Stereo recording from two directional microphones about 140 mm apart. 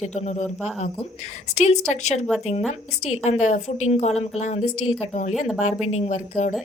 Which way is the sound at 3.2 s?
55° left (ahead or behind).